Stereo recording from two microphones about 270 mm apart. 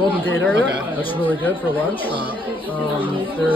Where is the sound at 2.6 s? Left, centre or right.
Centre.